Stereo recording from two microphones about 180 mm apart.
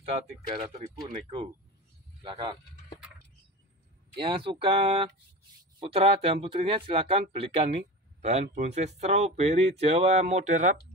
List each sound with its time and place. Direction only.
0.5 s speech: 35° right (ahead or behind)
2.2 s speech: 25° right (ahead or behind)
4.2 s speech: 30° right (ahead or behind)